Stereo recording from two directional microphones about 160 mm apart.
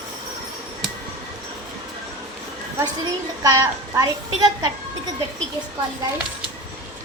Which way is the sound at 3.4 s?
20° right (ahead or behind).